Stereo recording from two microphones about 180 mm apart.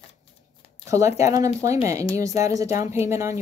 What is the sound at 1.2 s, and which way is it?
Speech, 15° right (ahead or behind).